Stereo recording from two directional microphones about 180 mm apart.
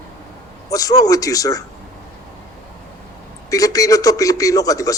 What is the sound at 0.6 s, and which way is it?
Speech, 20° left (ahead or behind).